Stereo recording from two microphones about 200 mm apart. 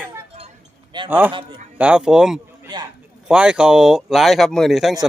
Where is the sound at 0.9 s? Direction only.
25° right (ahead or behind).